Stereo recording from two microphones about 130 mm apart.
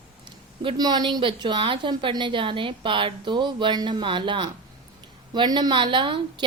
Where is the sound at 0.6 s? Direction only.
35° right (ahead or behind).